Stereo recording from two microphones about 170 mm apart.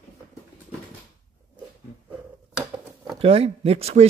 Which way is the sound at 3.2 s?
35° right (ahead or behind).